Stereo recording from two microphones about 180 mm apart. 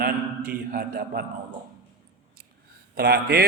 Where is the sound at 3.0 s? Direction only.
60° right (ahead or behind).